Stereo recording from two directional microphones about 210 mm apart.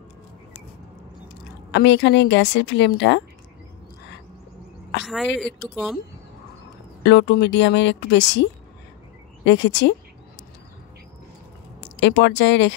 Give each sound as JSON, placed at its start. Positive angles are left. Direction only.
{"t": 1.7, "sound": "speech", "side_deg": 55}
{"t": 5.0, "sound": "a woman's voice", "side_deg": 0}
{"t": 7.0, "sound": "speech", "side_deg": 60}
{"t": 11.8, "sound": "speech", "side_deg": 55}